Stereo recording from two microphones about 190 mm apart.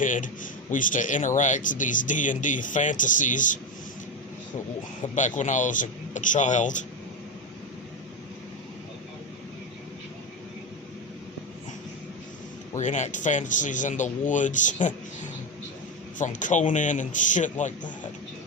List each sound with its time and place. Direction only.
0.0 s a man's voice: 45° left (ahead or behind)
5.1 s speech: 40° left (ahead or behind)
12.7 s speech: 40° left (ahead or behind)